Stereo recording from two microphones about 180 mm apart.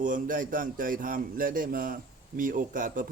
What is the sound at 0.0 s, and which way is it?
A man's voice, 45° right (ahead or behind).